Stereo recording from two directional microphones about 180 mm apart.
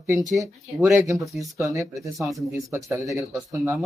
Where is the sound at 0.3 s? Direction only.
15° right (ahead or behind).